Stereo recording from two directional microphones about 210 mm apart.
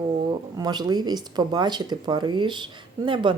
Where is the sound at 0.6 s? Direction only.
20° right (ahead or behind).